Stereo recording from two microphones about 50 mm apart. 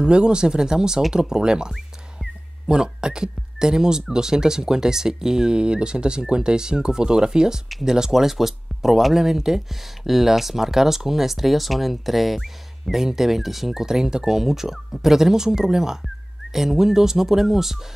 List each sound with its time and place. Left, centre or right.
0.0 s speech: centre
2.7 s speech: centre